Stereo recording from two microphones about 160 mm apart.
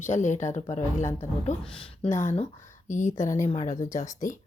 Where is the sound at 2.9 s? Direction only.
50° left (ahead or behind).